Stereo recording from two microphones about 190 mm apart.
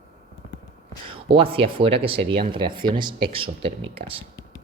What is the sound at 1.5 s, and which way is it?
Speech, 30° right (ahead or behind).